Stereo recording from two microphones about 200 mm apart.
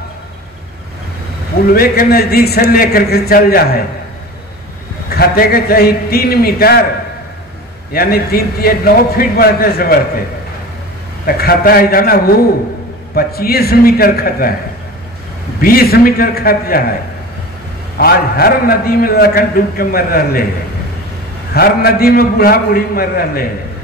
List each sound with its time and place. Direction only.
1.7 s a man's voice: 50° left (ahead or behind)
5.1 s a man's voice: 50° left (ahead or behind)
7.9 s a man's voice: 50° left (ahead or behind)
11.2 s a man's voice: 50° left (ahead or behind)
15.6 s a man's voice: 50° left (ahead or behind)
17.9 s a man's voice: 50° left (ahead or behind)
21.5 s a man's voice: 50° left (ahead or behind)